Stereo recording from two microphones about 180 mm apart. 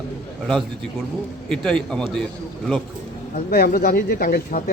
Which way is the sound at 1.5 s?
5° left (ahead or behind).